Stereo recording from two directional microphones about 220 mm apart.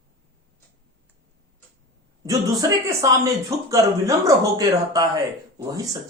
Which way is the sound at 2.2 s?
15° right (ahead or behind).